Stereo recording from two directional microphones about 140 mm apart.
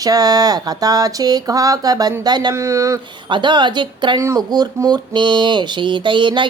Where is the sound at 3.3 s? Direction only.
35° right (ahead or behind).